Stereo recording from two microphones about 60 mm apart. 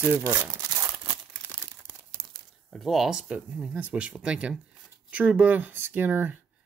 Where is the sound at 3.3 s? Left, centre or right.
Right.